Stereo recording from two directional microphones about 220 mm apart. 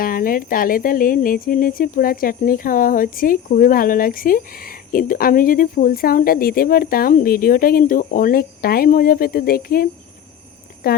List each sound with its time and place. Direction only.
0.0 s speech: 40° left (ahead or behind)